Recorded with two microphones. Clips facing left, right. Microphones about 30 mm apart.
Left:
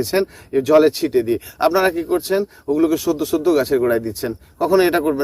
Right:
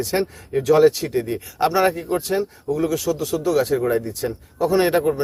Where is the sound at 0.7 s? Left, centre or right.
Left.